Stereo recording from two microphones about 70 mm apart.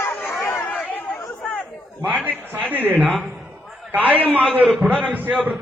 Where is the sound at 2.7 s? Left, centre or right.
Right.